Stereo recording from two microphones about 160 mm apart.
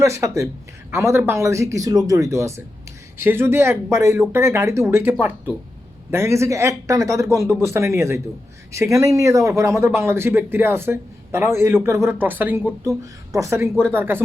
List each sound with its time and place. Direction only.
0.0 s speech: 20° right (ahead or behind)